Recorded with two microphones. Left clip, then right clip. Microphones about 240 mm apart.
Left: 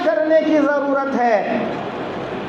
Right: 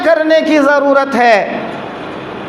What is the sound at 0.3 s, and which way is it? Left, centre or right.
Speech, right.